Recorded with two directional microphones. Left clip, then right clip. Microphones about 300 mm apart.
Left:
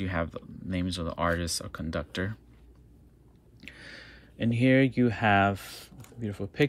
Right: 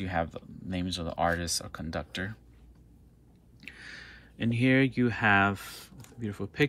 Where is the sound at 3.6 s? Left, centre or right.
Centre.